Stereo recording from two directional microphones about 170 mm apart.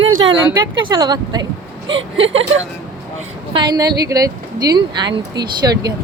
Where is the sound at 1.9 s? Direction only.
90° right.